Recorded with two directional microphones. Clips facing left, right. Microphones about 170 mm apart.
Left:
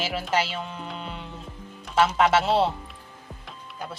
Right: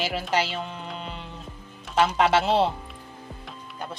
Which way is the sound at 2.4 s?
5° left (ahead or behind).